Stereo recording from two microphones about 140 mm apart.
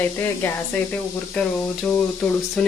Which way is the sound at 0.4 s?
15° left (ahead or behind).